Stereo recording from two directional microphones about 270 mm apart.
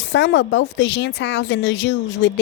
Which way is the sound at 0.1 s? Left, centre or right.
Left.